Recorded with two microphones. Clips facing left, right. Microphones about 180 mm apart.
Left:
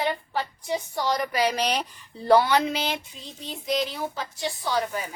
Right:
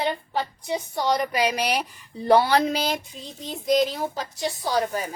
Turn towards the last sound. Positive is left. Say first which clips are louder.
# right 3 dB
turn(degrees=-40)  # may be behind; listen again after turning